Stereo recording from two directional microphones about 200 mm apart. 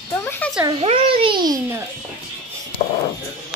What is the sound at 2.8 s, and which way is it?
Speech, 35° left (ahead or behind).